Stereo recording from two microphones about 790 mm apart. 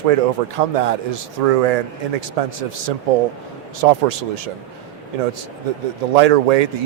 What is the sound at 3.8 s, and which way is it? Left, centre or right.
Speech, right.